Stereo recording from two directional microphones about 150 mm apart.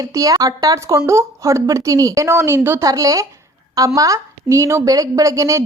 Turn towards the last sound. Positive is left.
turn(degrees=-20)  # may be behind; listen again after turning